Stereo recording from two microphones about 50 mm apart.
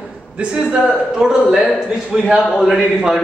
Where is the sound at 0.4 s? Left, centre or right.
Right.